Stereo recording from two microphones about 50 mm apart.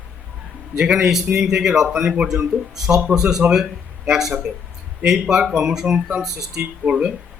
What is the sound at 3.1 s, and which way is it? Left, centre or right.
Speech, centre.